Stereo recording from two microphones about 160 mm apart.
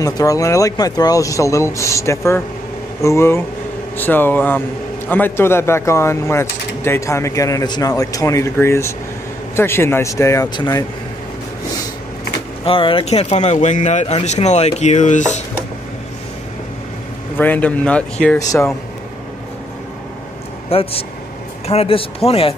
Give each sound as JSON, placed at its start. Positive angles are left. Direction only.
{"t": 0.0, "sound": "a man's voice", "side_deg": 20}
{"t": 12.6, "sound": "speech", "side_deg": 35}
{"t": 17.4, "sound": "a man's voice", "side_deg": 10}
{"t": 20.7, "sound": "speech", "side_deg": 35}